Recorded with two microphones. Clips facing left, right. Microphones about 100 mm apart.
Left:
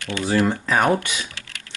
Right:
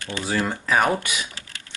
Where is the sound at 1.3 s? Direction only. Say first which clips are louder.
Left 1 dB; 25° right (ahead or behind).